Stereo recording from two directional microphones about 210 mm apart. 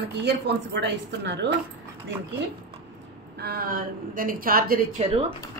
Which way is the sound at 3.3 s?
45° right (ahead or behind).